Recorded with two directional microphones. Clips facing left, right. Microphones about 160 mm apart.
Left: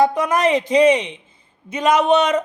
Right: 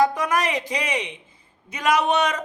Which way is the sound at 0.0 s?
25° left (ahead or behind).